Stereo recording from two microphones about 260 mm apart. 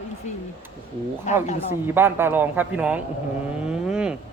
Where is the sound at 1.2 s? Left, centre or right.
Left.